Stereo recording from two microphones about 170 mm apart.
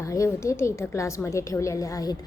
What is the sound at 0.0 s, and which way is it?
A woman's voice, 15° left (ahead or behind).